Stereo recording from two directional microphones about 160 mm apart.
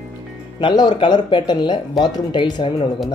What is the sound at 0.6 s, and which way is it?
Speech, 30° left (ahead or behind).